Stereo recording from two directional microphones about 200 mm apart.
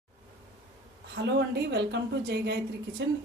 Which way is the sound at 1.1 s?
60° right (ahead or behind).